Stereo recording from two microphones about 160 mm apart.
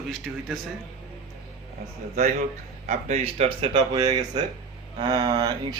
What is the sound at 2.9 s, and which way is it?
Speech, 40° right (ahead or behind).